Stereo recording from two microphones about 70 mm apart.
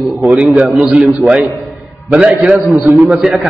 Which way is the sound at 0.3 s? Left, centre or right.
Centre.